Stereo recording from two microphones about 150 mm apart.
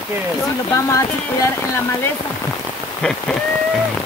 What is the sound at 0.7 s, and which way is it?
Speech, 20° left (ahead or behind).